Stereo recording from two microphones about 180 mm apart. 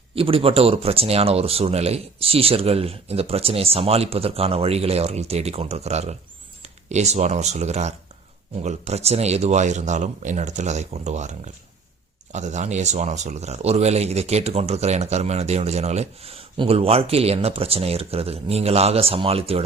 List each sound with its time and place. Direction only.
0.1 s speech: 30° right (ahead or behind)